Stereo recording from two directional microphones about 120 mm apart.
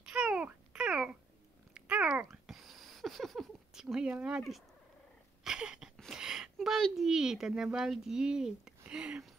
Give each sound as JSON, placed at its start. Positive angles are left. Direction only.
{"t": 0.0, "sound": "babbling", "side_deg": -5}
{"t": 1.7, "sound": "a sound", "side_deg": -10}
{"t": 5.9, "sound": "speech", "side_deg": -5}